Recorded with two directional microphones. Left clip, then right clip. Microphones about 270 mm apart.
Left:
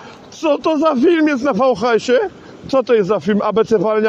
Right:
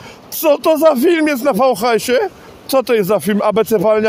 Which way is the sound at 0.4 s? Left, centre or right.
Right.